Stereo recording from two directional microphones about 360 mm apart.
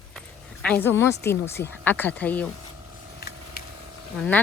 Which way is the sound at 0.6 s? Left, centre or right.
Centre.